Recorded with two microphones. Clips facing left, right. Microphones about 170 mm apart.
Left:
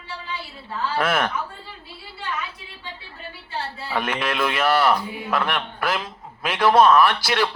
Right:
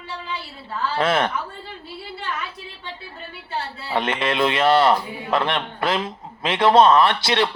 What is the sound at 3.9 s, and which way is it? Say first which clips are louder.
A man's voice: right 3 dB; 25° right (ahead or behind).